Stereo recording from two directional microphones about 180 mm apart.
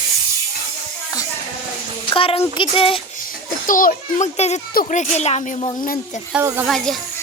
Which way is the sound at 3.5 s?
50° left (ahead or behind).